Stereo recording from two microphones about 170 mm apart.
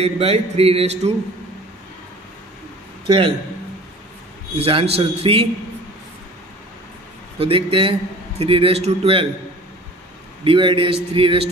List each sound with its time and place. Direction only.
0.0 s a man's voice: 35° right (ahead or behind)
3.1 s a man's voice: 30° right (ahead or behind)
4.6 s a man's voice: 35° right (ahead or behind)
7.3 s a man's voice: 30° right (ahead or behind)
10.4 s a man's voice: 30° right (ahead or behind)